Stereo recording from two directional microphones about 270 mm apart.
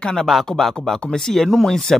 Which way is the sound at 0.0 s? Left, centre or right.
Centre.